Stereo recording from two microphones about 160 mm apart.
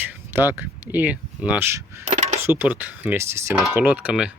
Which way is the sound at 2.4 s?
15° right (ahead or behind).